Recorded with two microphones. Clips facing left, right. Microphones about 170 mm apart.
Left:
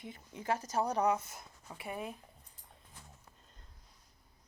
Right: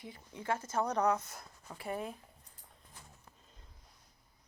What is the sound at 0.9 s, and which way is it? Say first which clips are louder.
Speech: even; 10° left (ahead or behind).